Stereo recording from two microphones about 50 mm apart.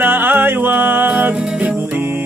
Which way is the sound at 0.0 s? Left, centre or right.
Right.